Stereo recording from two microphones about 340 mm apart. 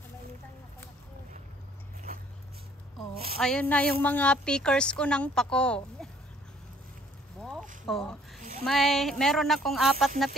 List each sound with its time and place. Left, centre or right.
3.3 s a woman's voice: centre
7.8 s a woman's voice: centre
8.4 s a sound: right
8.6 s a woman's voice: centre